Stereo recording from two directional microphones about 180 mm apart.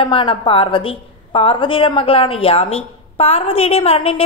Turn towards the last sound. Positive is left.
turn(degrees=30)  # may be behind; listen again after turning